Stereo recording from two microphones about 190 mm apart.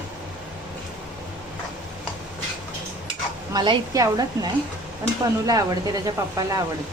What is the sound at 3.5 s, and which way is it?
Speech, 20° right (ahead or behind).